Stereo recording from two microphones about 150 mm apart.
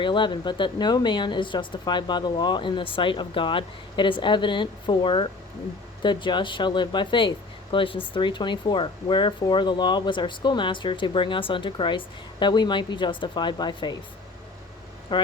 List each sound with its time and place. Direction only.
0.0 s a woman's voice: 30° left (ahead or behind)
15.1 s a woman's voice: 30° left (ahead or behind)